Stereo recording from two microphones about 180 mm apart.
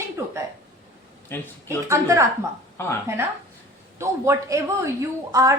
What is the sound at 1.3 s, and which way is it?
Speech, 10° left (ahead or behind).